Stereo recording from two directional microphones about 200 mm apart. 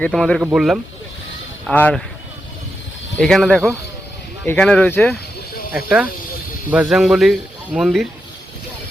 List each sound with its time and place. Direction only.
0.0 s speech: 5° left (ahead or behind)
3.2 s speech: centre (ahead or behind)
5.7 s speech: 5° right (ahead or behind)